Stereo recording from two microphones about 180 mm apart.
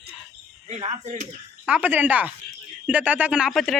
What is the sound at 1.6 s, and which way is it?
Speech, 10° right (ahead or behind).